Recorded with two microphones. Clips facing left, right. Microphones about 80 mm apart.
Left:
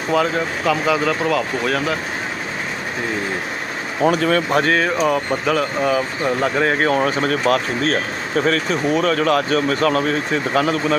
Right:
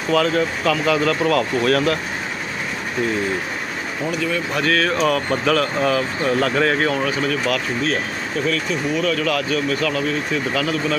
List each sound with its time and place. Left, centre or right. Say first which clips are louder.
0.1 s speech: right 1 dB; centre
4.0 s speech: left 7 dB; left
4.6 s speech: left 1 dB; left
4.9 s speech: left 1 dB; centre
6.7 s speech: left 3 dB; left